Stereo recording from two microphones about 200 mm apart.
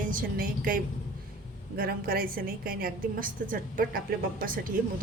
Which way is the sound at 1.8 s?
50° right (ahead or behind).